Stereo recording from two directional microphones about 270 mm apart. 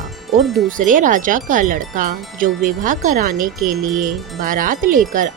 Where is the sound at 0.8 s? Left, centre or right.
Right.